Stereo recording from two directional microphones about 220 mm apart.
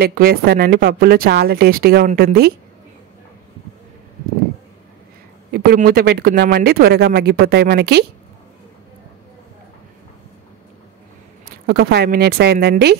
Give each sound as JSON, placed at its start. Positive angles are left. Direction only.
{"t": 0.0, "sound": "speech", "side_deg": -45}
{"t": 5.5, "sound": "speech", "side_deg": -45}
{"t": 11.4, "sound": "speech", "side_deg": -45}